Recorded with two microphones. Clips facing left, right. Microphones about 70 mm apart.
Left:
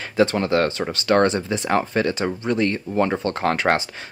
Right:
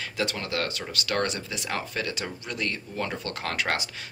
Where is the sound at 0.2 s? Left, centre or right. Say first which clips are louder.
Left 11 dB; left.